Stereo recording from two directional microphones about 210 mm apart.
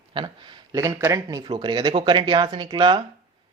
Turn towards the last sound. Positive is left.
turn(degrees=-20)  # may be behind; listen again after turning